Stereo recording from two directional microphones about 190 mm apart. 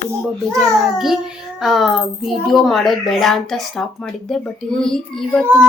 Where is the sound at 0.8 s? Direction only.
Centre (ahead or behind).